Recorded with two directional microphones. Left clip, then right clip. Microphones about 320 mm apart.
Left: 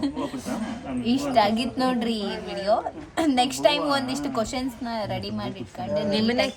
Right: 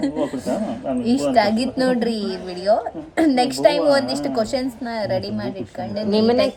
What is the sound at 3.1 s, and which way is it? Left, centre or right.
Speech, centre.